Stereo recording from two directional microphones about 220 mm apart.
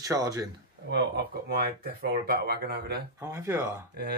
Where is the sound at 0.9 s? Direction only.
45° right (ahead or behind).